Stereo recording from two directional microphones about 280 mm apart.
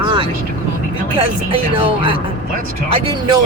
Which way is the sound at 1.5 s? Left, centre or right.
Centre.